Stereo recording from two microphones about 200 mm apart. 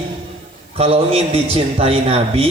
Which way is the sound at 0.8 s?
30° right (ahead or behind).